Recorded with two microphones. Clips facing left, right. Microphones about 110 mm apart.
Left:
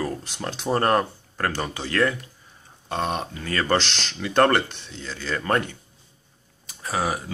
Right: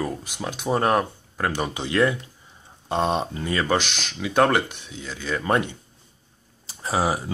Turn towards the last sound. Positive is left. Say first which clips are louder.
# right 3 dB
turn(degrees=-25)  # may be behind; listen again after turning